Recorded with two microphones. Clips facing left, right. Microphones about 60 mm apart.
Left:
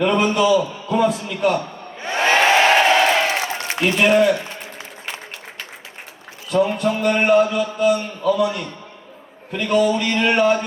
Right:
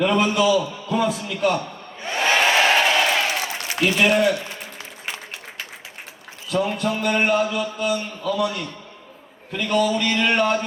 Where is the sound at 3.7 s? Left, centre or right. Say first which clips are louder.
Right 1 dB; left.